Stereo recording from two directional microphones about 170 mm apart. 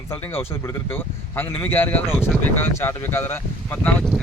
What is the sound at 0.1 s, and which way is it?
Speech, 15° left (ahead or behind).